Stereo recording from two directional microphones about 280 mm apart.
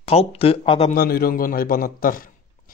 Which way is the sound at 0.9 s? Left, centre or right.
Left.